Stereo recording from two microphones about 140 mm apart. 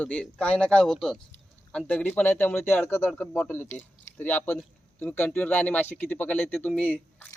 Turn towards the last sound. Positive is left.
turn(degrees=10)  # may be behind; listen again after turning